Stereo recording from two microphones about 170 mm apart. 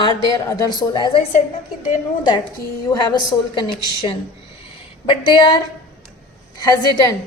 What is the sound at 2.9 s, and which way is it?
A woman's voice, 25° left (ahead or behind).